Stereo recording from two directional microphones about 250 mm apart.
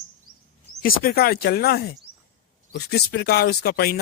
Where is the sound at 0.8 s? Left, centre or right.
Left.